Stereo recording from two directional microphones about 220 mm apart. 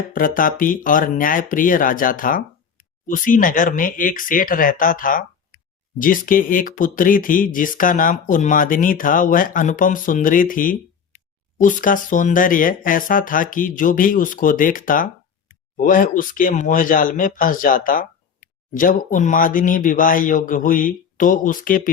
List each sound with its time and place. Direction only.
0.1 s speech: 40° left (ahead or behind)